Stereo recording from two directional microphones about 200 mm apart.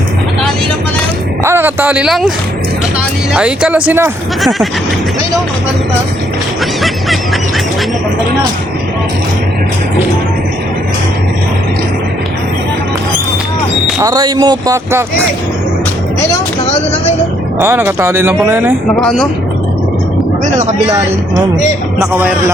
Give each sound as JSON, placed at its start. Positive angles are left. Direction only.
{"t": 1.5, "sound": "speech", "side_deg": -10}
{"t": 3.3, "sound": "speech", "side_deg": -5}
{"t": 14.0, "sound": "speech", "side_deg": -20}
{"t": 17.6, "sound": "speech", "side_deg": -10}
{"t": 18.9, "sound": "speech", "side_deg": 5}
{"t": 20.4, "sound": "speech", "side_deg": -35}
{"t": 22.2, "sound": "speech", "side_deg": -10}